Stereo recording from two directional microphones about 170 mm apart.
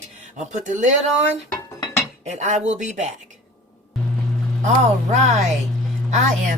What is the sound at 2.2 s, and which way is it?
Speech, 45° right (ahead or behind).